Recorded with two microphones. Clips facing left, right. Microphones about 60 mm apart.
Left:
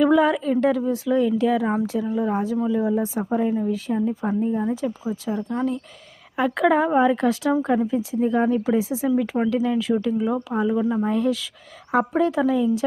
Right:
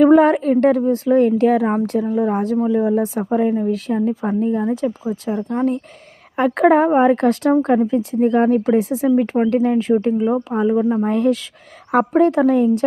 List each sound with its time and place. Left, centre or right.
0.0 s speech: right
3.7 s speech: right
5.1 s speech: right
10.2 s speech: right
11.0 s speech: right